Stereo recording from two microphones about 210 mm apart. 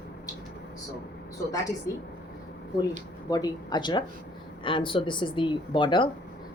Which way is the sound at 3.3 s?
20° left (ahead or behind).